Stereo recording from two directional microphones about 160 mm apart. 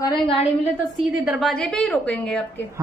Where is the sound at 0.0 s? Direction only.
30° left (ahead or behind).